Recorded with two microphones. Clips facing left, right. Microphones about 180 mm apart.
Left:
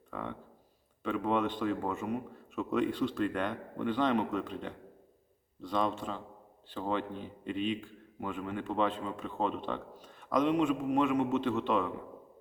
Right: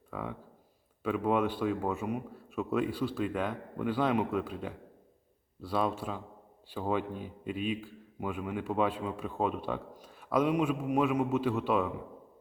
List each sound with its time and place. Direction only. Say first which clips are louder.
0.1 s a man's voice: right 1 dB; 5° right (ahead or behind)